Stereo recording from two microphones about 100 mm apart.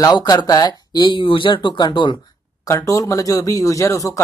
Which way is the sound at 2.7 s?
35° left (ahead or behind).